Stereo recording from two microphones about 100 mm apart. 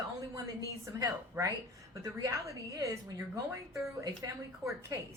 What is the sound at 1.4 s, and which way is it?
A woman's voice, 25° right (ahead or behind).